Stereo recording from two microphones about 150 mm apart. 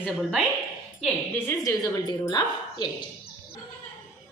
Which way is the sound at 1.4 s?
25° left (ahead or behind).